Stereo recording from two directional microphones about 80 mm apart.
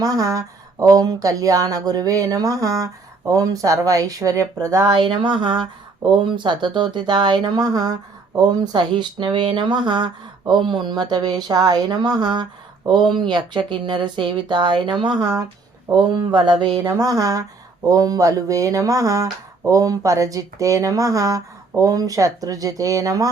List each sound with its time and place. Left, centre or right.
0.0 s speech: right
4.9 s a sound: right
6.2 s speech: right
16.3 s speech: right
17.0 s speech: right